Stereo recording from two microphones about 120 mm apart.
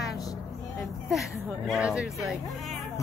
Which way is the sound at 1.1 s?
Centre (ahead or behind).